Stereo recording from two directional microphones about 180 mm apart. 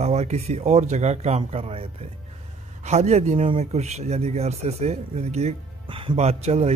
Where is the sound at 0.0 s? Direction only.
35° right (ahead or behind).